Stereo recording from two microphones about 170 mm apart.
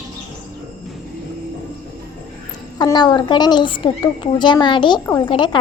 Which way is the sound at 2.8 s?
25° left (ahead or behind).